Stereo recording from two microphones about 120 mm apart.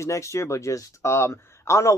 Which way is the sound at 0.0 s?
25° left (ahead or behind).